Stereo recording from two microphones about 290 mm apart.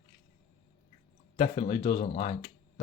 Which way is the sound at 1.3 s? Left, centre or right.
Left.